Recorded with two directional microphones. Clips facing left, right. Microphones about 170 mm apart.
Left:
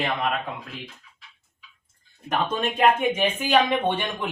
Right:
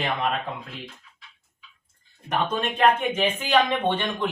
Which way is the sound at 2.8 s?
10° left (ahead or behind).